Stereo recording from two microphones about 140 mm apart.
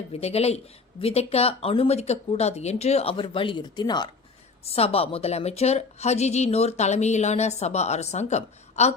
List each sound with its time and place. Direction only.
0.1 s a woman's voice: 45° left (ahead or behind); by 4.1 s 30° left (ahead or behind)
4.6 s a woman's voice: 45° left (ahead or behind)